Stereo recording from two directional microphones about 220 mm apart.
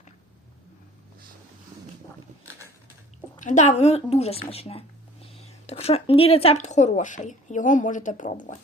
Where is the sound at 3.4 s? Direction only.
35° left (ahead or behind).